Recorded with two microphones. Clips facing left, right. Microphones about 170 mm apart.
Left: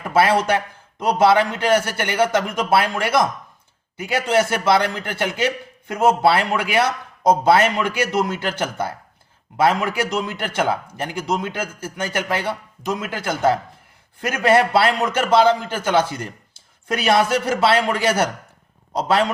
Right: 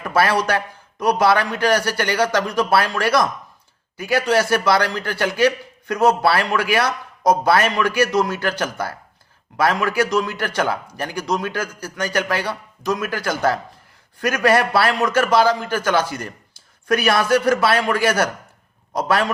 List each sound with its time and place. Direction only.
0.1 s a man's voice: 25° left (ahead or behind)